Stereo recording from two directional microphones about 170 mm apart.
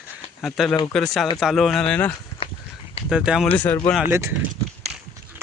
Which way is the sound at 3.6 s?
10° left (ahead or behind).